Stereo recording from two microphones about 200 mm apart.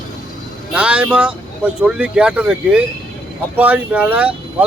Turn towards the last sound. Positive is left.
turn(degrees=-5)  # may be behind; listen again after turning